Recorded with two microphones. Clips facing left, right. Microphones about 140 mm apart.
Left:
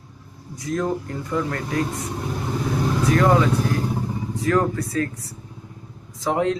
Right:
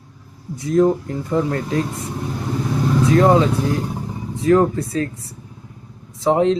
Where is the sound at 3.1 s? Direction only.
25° right (ahead or behind).